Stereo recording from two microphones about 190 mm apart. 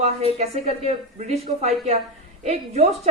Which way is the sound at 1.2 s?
35° right (ahead or behind).